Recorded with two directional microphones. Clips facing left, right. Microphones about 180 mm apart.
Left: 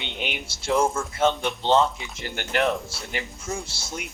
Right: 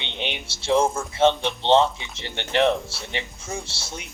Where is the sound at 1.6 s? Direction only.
25° right (ahead or behind).